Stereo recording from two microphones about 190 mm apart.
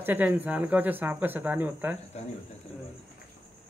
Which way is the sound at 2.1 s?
35° left (ahead or behind).